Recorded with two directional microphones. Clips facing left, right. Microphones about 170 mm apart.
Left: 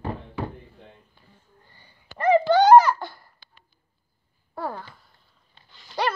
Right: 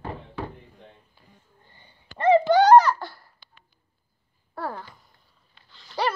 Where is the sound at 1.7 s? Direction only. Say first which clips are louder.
Even; 25° right (ahead or behind).